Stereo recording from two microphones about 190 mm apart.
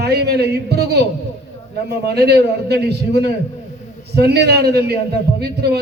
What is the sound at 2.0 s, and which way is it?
Speech, 60° right (ahead or behind).